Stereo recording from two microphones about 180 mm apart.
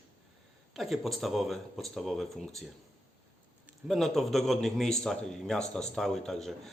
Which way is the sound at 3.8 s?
Centre (ahead or behind).